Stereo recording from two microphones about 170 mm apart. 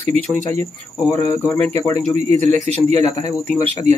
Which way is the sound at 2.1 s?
40° right (ahead or behind).